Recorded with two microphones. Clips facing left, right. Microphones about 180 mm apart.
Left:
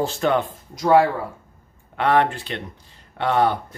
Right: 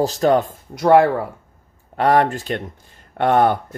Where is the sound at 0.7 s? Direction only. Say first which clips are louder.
Right 3 dB; 60° right (ahead or behind).